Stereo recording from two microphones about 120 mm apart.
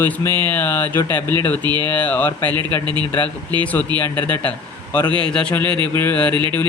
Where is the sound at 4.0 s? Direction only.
15° left (ahead or behind).